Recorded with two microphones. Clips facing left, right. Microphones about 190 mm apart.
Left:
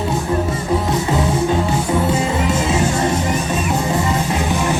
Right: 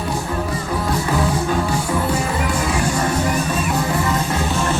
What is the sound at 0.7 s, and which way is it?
Music, 25° left (ahead or behind).